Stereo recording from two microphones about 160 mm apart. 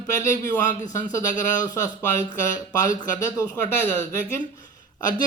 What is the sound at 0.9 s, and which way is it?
Speech, 20° left (ahead or behind).